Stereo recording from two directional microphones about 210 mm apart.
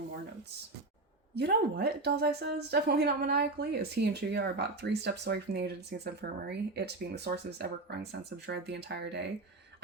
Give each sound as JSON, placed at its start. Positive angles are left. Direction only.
{"t": 1.4, "sound": "speech", "side_deg": -50}